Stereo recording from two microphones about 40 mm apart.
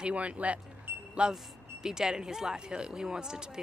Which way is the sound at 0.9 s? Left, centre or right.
Right.